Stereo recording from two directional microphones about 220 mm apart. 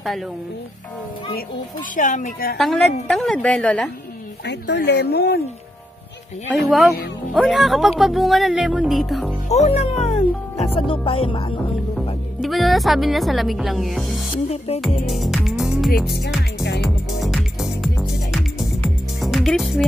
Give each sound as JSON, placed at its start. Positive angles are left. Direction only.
{"t": 2.0, "sound": "a woman's voice", "side_deg": 35}
{"t": 2.5, "sound": "speech", "side_deg": 0}
{"t": 4.5, "sound": "speech", "side_deg": 50}
{"t": 6.5, "sound": "speech", "side_deg": 0}
{"t": 9.5, "sound": "a woman's voice", "side_deg": 30}
{"t": 10.0, "sound": "music", "side_deg": 25}
{"t": 12.4, "sound": "speech", "side_deg": 0}
{"t": 15.0, "sound": "music", "side_deg": 0}